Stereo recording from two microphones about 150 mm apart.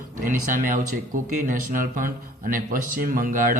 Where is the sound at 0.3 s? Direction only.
65° right (ahead or behind).